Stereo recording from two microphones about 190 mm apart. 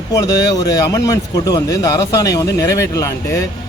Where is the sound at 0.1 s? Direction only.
20° left (ahead or behind).